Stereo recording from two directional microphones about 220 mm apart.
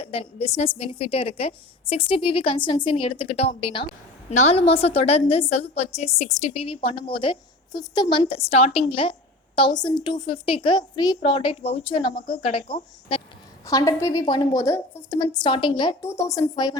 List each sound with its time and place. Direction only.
0.0 s a woman's voice: 25° left (ahead or behind)
13.7 s a woman's voice: 15° left (ahead or behind)